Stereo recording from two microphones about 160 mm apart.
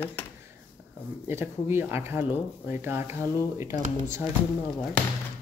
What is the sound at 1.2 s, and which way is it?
Speech, 15° right (ahead or behind).